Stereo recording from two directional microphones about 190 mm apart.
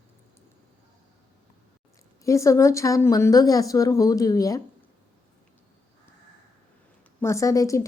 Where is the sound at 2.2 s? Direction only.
15° left (ahead or behind).